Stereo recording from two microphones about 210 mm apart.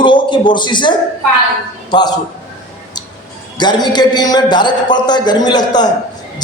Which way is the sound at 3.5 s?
20° left (ahead or behind).